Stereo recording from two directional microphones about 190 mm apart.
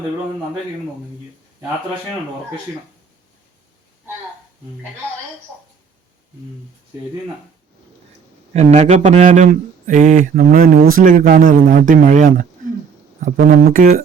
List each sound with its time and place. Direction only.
8.5 s speech: 35° right (ahead or behind)
13.5 s speech: 50° right (ahead or behind)